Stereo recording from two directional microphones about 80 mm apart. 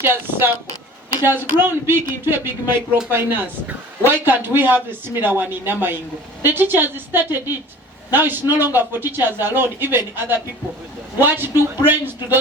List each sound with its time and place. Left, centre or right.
0.0 s speech: right
11.2 s speech: right